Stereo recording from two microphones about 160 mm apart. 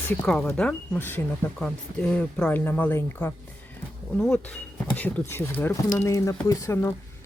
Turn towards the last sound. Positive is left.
turn(degrees=20)  # may be behind; listen again after turning